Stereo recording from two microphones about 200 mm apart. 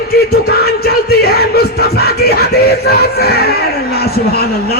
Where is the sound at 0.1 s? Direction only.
50° left (ahead or behind).